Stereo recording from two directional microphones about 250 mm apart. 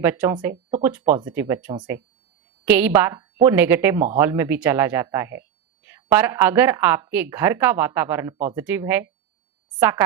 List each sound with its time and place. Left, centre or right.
0.0 s speech: centre